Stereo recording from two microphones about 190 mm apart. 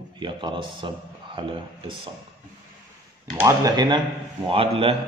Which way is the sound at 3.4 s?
20° right (ahead or behind).